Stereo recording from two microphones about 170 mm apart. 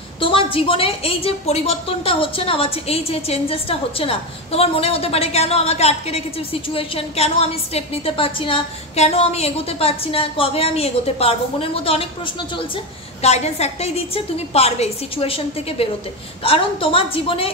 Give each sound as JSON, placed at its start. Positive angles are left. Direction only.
{"t": 0.2, "sound": "a woman's voice", "side_deg": 30}